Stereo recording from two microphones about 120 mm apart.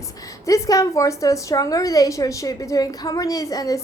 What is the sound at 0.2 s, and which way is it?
A woman's voice, 30° left (ahead or behind).